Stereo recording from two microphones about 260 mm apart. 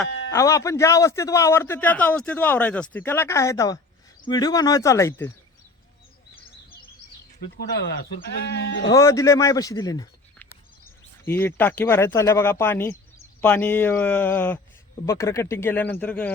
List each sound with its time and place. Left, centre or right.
0.3 s a man's voice: centre
8.2 s speech: left
8.9 s a man's voice: centre